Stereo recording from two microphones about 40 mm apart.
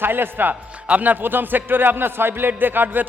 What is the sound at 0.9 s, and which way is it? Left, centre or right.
Speech, right.